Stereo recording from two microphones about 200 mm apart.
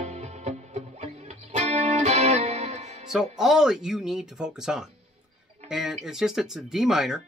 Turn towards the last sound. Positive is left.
turn(degrees=0)  # may be behind; listen again after turning